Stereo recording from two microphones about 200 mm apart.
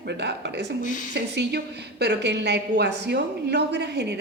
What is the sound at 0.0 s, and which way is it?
Speech, 55° right (ahead or behind).